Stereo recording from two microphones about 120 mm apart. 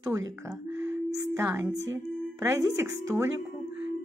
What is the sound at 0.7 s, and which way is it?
Music, 15° right (ahead or behind).